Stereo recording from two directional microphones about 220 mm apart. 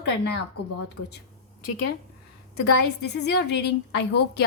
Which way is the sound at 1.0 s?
65° left (ahead or behind).